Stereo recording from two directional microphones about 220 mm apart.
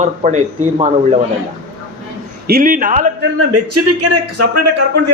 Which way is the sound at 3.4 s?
90° right.